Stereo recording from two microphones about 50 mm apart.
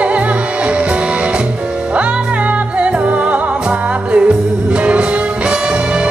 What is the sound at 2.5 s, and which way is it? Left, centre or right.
Music, right.